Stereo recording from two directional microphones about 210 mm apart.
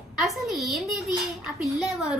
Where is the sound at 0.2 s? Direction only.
Centre (ahead or behind).